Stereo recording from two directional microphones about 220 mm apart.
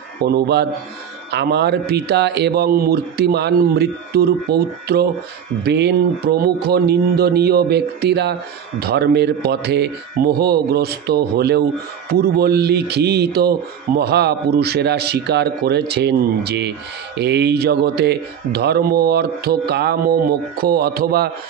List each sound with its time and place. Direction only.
0.2 s speech: 50° right (ahead or behind)